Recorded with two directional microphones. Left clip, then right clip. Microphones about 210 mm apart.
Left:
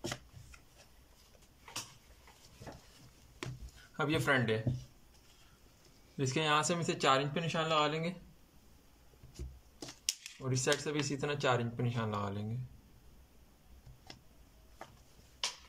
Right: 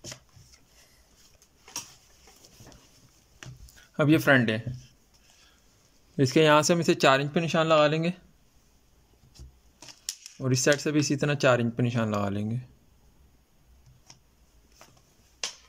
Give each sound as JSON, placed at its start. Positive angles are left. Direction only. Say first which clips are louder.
{"t": 3.9, "sound": "speech", "louder": "right 10 dB", "side_deg": -40}
{"t": 6.1, "sound": "speech", "louder": "right 11 dB", "side_deg": -40}
{"t": 10.3, "sound": "speech", "louder": "right 11 dB", "side_deg": -40}